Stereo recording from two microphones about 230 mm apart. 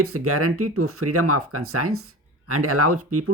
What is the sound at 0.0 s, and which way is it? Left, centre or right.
Speech, right.